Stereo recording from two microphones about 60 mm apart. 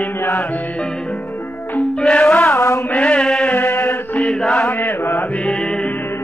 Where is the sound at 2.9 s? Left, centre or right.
Centre.